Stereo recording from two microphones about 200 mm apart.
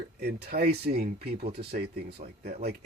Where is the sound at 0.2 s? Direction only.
55° right (ahead or behind).